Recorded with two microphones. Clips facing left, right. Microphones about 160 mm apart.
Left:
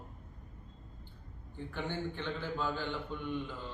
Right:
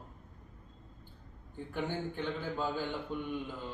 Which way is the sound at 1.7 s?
15° right (ahead or behind).